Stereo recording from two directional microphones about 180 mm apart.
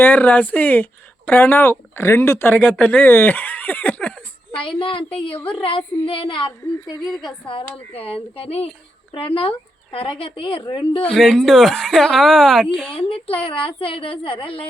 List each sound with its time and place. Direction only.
0.0 s speech: 10° left (ahead or behind)
4.6 s speech: 30° left (ahead or behind)
11.0 s speech: centre (ahead or behind)
12.9 s speech: 30° left (ahead or behind)